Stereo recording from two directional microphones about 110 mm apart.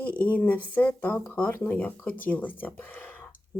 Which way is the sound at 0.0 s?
15° left (ahead or behind).